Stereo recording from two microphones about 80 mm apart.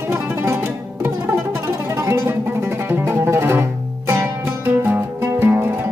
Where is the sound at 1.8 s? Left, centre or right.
Right.